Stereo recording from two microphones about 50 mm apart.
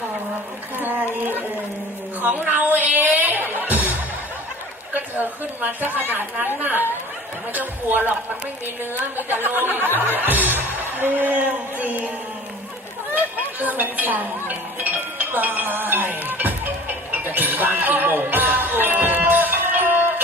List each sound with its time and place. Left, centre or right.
0.8 s a sound: right
2.2 s music: right
4.9 s a woman's voice: right
13.1 s music: right